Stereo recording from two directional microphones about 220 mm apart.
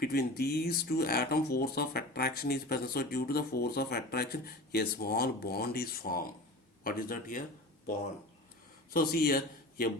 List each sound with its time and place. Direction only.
0.0 s speech: 45° left (ahead or behind)
8.9 s speech: 45° left (ahead or behind)